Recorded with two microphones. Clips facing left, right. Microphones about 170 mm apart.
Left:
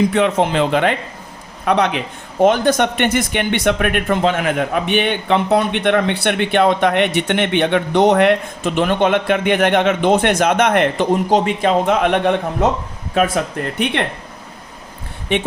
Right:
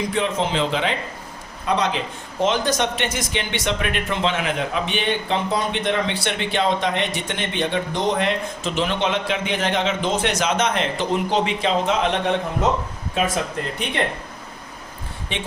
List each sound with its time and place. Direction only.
0.1 s speech: 65° left (ahead or behind)